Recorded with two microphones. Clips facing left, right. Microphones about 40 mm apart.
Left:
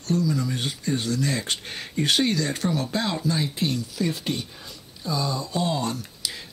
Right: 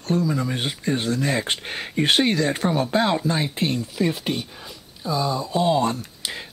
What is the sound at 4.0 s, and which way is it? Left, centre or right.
Speech, centre.